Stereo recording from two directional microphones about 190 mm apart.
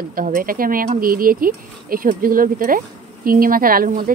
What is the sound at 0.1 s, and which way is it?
Speech, 45° right (ahead or behind).